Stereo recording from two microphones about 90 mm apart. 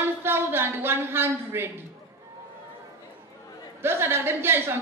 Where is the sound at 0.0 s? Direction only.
25° right (ahead or behind).